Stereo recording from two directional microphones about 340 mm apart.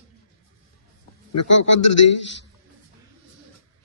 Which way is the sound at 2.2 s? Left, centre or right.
Left.